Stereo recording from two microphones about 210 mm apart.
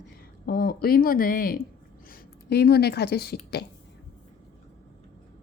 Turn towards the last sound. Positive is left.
turn(degrees=50)  # may be behind; listen again after turning